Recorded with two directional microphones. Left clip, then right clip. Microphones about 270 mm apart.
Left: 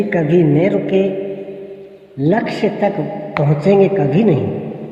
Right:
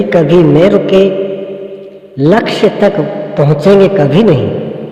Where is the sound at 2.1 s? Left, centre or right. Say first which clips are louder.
Right 8 dB; right.